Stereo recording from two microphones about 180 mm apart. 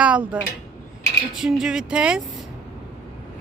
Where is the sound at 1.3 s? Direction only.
5° right (ahead or behind).